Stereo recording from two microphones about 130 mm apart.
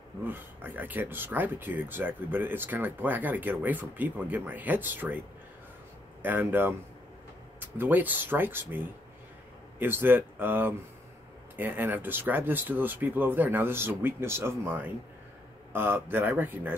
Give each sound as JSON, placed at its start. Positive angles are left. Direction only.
{"t": 0.2, "sound": "speech", "side_deg": -15}
{"t": 6.2, "sound": "speech", "side_deg": -15}